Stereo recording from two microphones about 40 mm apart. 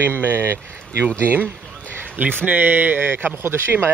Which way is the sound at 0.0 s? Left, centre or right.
Right.